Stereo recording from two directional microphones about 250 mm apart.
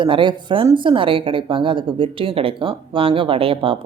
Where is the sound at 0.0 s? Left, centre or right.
Centre.